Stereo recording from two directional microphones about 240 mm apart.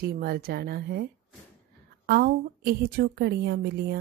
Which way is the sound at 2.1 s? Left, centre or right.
Right.